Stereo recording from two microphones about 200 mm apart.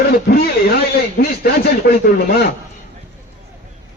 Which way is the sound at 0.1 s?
50° left (ahead or behind).